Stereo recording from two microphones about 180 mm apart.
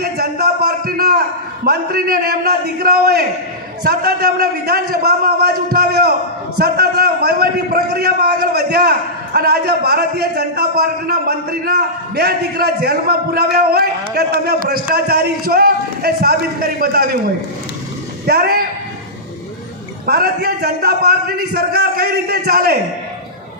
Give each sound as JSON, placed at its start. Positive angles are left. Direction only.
{"t": 0.0, "sound": "a sound", "side_deg": -60}
{"t": 1.6, "sound": "a man's voice", "side_deg": -60}
{"t": 20.1, "sound": "a man's voice", "side_deg": -60}